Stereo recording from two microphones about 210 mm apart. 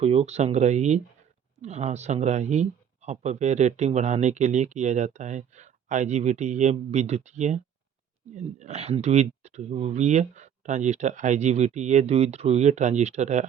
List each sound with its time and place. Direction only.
0.0 s speech: 30° right (ahead or behind)